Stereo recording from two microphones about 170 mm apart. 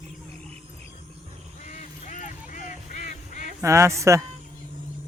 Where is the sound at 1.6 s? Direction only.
45° left (ahead or behind).